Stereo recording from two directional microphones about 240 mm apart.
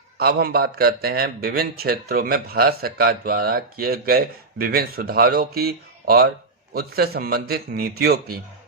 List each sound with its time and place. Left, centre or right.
0.2 s a man's voice: right